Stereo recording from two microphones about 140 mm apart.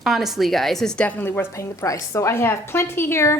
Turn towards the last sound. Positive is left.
turn(degrees=20)  # may be behind; listen again after turning